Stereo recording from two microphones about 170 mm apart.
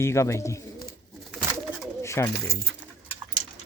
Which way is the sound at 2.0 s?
15° left (ahead or behind).